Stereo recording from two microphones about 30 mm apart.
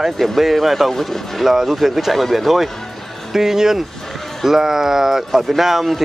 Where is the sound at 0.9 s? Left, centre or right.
Centre.